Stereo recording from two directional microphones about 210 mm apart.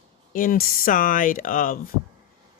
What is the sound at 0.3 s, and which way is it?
Speech, 40° left (ahead or behind).